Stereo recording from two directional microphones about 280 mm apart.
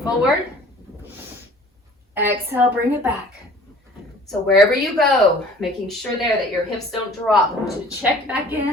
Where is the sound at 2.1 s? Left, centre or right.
Centre.